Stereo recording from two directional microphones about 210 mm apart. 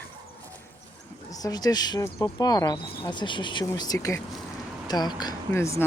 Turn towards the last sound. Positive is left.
turn(degrees=15)  # may be behind; listen again after turning